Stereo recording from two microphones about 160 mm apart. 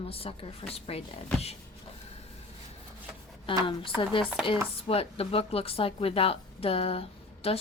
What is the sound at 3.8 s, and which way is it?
Speech, 30° left (ahead or behind).